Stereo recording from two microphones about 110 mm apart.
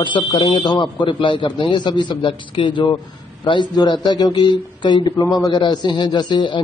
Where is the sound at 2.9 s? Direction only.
45° left (ahead or behind).